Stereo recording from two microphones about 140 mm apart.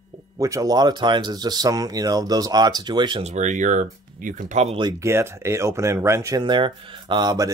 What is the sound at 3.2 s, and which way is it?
Speech, 60° right (ahead or behind).